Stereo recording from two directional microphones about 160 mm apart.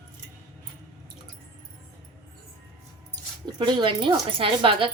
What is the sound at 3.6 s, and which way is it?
A woman's voice, 30° right (ahead or behind).